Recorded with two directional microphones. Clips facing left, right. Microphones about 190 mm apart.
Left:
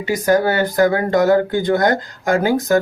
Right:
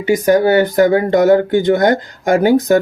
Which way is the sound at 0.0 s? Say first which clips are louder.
Right 4 dB; 20° right (ahead or behind).